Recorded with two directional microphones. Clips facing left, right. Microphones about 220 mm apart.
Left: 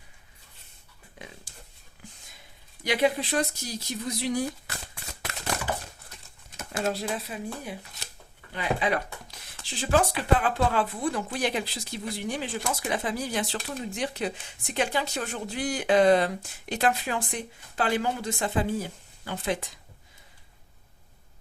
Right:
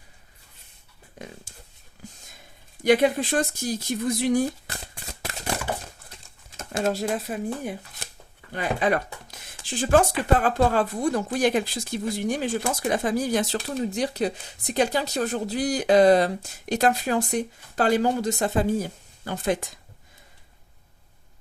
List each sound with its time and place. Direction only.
2.8 s speech: 50° right (ahead or behind)
5.5 s a sound: 30° right (ahead or behind)
6.8 s speech: 45° right (ahead or behind)